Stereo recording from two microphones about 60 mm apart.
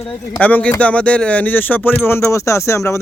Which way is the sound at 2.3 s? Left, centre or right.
Left.